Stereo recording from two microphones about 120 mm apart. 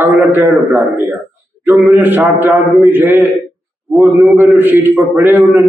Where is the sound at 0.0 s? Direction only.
20° right (ahead or behind).